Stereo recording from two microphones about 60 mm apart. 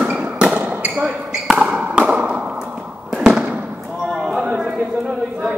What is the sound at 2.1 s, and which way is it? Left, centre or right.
Fireworks, centre.